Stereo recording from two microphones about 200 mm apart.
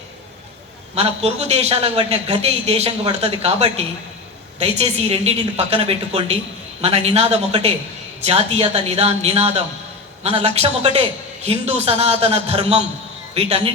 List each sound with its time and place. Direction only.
0.9 s a man's voice: 30° right (ahead or behind)